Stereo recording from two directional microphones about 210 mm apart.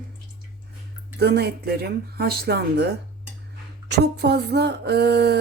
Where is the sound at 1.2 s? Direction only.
50° right (ahead or behind).